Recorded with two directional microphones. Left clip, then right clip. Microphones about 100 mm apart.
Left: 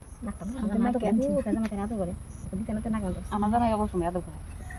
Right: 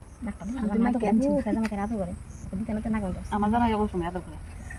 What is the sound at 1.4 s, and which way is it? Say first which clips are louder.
Speech: right 2 dB; 10° left (ahead or behind).